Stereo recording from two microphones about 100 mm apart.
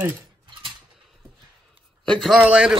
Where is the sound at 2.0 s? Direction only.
5° left (ahead or behind).